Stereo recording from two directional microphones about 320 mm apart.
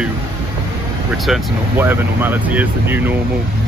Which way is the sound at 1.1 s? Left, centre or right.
Centre.